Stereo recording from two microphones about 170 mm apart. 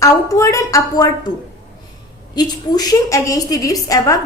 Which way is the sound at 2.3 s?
25° left (ahead or behind).